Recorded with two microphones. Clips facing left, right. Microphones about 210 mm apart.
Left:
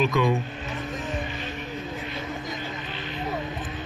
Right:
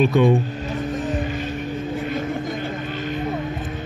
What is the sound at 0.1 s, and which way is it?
Speech, 30° right (ahead or behind).